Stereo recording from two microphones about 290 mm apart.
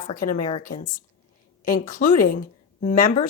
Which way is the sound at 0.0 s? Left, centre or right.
Left.